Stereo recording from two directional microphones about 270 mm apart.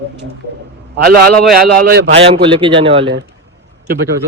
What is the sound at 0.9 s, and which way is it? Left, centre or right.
A man's voice, right.